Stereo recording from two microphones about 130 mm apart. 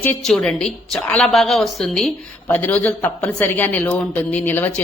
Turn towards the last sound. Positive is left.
turn(degrees=15)  # may be behind; listen again after turning